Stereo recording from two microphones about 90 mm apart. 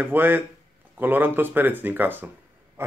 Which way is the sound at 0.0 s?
20° right (ahead or behind).